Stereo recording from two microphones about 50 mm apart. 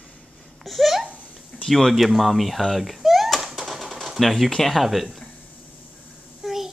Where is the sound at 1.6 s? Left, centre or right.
Centre.